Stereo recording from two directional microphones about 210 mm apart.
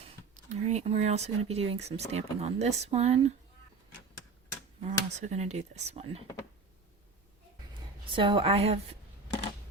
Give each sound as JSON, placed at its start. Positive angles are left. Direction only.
{"t": 0.5, "sound": "speech", "side_deg": -30}
{"t": 4.8, "sound": "speech", "side_deg": -30}
{"t": 7.7, "sound": "speech", "side_deg": -25}